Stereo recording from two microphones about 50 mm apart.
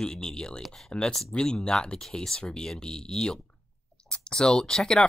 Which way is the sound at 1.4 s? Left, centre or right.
Centre.